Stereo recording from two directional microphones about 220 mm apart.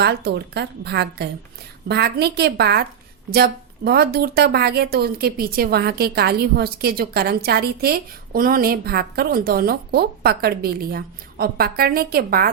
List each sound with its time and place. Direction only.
0.0 s a woman's voice: 45° right (ahead or behind)